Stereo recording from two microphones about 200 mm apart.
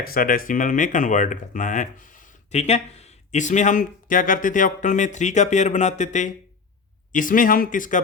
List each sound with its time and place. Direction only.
0.0 s speech: 45° left (ahead or behind)